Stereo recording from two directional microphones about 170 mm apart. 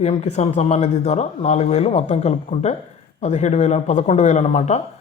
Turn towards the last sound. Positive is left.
turn(degrees=40)  # may be behind; listen again after turning